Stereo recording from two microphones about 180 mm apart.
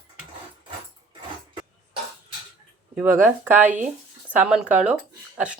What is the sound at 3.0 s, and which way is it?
Speech, 10° right (ahead or behind).